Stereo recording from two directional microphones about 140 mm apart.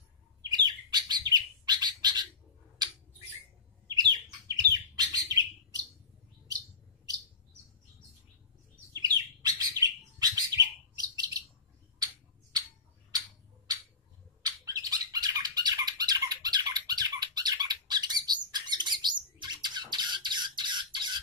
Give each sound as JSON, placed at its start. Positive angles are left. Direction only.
{"t": 0.5, "sound": "bird", "side_deg": -30}
{"t": 2.8, "sound": "squawk", "side_deg": -30}
{"t": 3.9, "sound": "bird", "side_deg": -30}
{"t": 8.9, "sound": "bird", "side_deg": -25}
{"t": 14.4, "sound": "squawk", "side_deg": -25}